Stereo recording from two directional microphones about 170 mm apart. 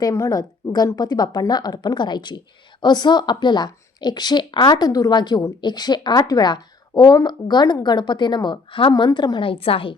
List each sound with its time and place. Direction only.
0.0 s a woman's voice: 20° left (ahead or behind)